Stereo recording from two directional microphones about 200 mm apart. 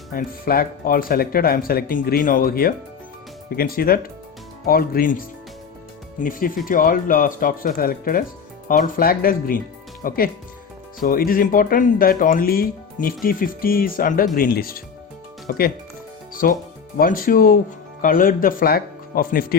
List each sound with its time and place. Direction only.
0.1 s speech: 45° left (ahead or behind)
6.7 s speech: 45° left (ahead or behind)